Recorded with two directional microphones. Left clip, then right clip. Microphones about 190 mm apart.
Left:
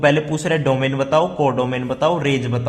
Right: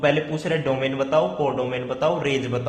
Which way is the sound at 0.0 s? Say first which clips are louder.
Left 4 dB; 25° left (ahead or behind).